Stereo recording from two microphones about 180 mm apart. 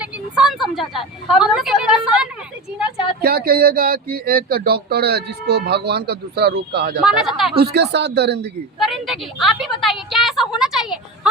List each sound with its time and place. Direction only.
0.0 s a sound: 5° right (ahead or behind)
3.2 s speech: 60° right (ahead or behind)
7.0 s a woman's voice: 5° right (ahead or behind)
7.5 s speech: 65° right (ahead or behind)
8.8 s a woman's voice: centre (ahead or behind)